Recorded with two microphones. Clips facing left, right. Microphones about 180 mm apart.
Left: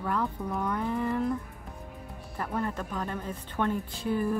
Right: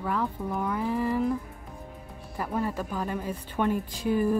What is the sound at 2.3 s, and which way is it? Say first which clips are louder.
A woman's voice: right 2 dB; 10° right (ahead or behind).